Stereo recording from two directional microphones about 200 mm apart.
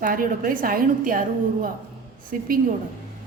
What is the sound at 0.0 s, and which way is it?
A woman's voice, 45° right (ahead or behind).